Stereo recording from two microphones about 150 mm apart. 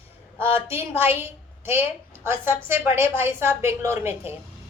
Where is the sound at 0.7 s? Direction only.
15° right (ahead or behind).